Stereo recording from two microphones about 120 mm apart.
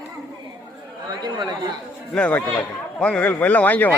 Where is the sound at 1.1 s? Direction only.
35° right (ahead or behind).